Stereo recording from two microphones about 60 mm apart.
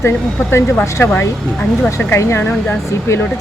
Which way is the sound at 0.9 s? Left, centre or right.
Left.